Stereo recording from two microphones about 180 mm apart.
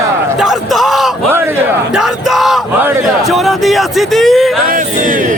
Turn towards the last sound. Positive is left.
turn(degrees=0)  # may be behind; listen again after turning